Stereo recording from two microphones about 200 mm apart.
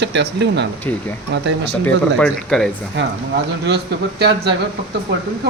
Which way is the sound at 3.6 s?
55° right (ahead or behind).